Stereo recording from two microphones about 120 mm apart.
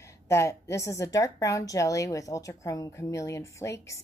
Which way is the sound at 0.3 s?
25° left (ahead or behind).